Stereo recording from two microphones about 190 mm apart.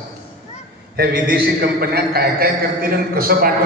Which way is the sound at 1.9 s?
55° right (ahead or behind).